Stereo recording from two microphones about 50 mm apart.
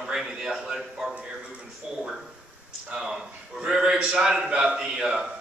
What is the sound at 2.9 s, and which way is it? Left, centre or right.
A man's voice, centre.